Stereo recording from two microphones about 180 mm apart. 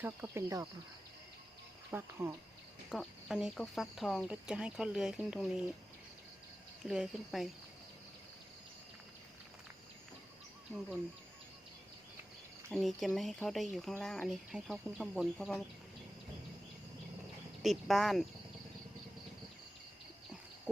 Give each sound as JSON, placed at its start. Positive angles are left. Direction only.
{"t": 0.0, "sound": "speech", "side_deg": -10}
{"t": 1.9, "sound": "speech", "side_deg": -15}
{"t": 2.9, "sound": "speech", "side_deg": 0}
{"t": 6.8, "sound": "speech", "side_deg": -5}
{"t": 12.7, "sound": "speech", "side_deg": 0}
{"t": 17.6, "sound": "speech", "side_deg": 0}